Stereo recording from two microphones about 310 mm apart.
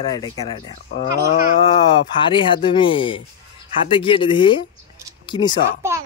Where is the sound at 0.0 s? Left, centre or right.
Centre.